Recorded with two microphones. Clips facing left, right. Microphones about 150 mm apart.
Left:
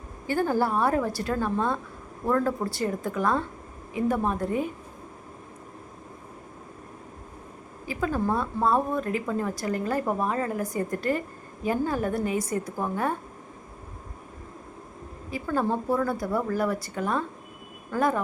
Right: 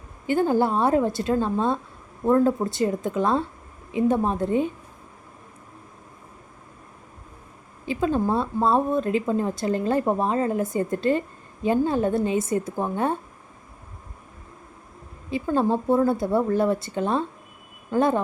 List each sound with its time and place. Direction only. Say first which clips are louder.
0.3 s a woman's voice: right 4 dB; 20° right (ahead or behind)
7.9 s a woman's voice: right 4 dB; 25° right (ahead or behind)
15.3 s a woman's voice: right 4 dB; 20° right (ahead or behind)